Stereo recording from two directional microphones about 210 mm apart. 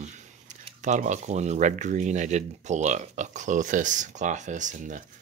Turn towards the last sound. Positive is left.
turn(degrees=-35)  # may be behind; listen again after turning